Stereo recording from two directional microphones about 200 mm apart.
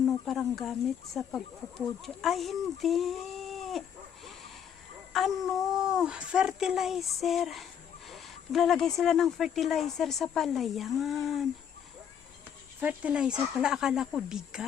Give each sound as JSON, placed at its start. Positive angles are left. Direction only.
{"t": 0.0, "sound": "speech", "side_deg": 0}
{"t": 12.8, "sound": "speech", "side_deg": -5}